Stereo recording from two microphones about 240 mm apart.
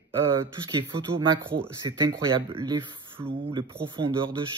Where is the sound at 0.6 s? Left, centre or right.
Centre.